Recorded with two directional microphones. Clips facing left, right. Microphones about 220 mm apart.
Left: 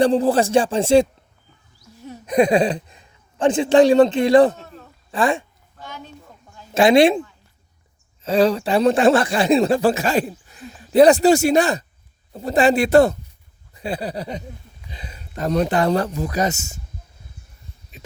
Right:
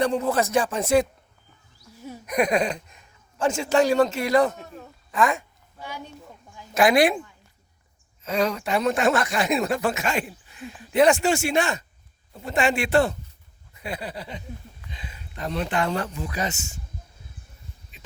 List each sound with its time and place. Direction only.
0.0 s speech: 30° left (ahead or behind)
2.2 s a man's voice: 30° left (ahead or behind)
4.5 s a sound: 15° right (ahead or behind)
5.1 s speech: 30° left (ahead or behind)
5.7 s a sound: 10° right (ahead or behind)
6.7 s speech: 25° left (ahead or behind)
8.2 s speech: 30° left (ahead or behind)